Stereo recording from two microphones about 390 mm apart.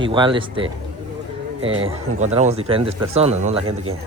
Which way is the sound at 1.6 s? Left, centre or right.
Right.